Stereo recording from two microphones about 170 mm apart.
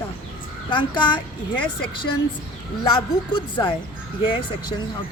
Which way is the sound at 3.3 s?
30° left (ahead or behind).